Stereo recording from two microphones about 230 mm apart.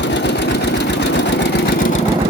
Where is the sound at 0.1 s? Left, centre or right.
Left.